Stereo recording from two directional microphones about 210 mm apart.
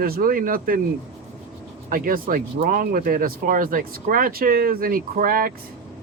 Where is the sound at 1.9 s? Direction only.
40° right (ahead or behind).